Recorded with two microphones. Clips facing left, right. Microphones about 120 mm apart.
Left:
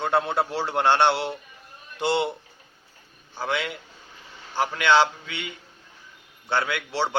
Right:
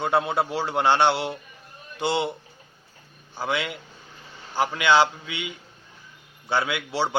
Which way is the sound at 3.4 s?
5° right (ahead or behind).